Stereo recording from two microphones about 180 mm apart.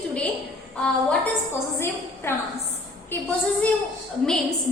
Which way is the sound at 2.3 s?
15° left (ahead or behind).